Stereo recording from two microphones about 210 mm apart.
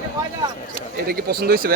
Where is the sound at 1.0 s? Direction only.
45° right (ahead or behind).